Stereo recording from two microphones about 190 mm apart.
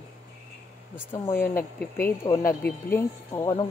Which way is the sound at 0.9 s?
10° left (ahead or behind).